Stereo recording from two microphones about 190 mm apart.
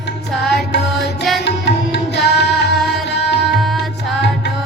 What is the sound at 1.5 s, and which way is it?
Tabla, 65° left (ahead or behind).